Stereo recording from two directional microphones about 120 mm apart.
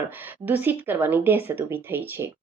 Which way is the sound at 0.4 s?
15° right (ahead or behind).